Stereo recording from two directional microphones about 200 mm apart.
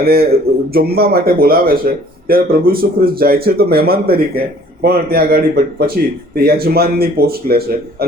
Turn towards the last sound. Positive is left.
turn(degrees=-50)  # may be behind; listen again after turning